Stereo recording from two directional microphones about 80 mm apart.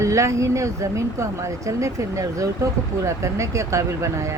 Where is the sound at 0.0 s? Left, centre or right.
Right.